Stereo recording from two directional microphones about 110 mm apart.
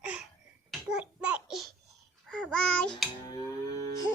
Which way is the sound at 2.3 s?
5° left (ahead or behind).